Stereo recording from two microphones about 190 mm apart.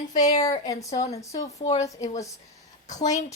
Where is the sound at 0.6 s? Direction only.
20° left (ahead or behind).